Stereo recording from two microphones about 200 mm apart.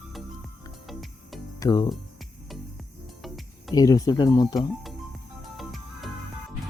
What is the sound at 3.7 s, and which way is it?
Speech, 15° left (ahead or behind).